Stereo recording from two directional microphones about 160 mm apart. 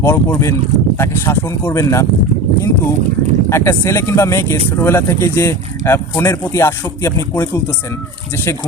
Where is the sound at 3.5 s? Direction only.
15° left (ahead or behind).